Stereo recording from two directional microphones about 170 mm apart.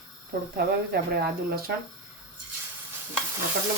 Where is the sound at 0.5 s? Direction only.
70° right (ahead or behind).